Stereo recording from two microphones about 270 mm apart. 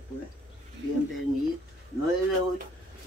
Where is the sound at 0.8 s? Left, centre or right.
Right.